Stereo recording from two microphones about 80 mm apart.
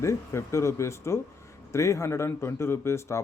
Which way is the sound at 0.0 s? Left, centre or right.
Left.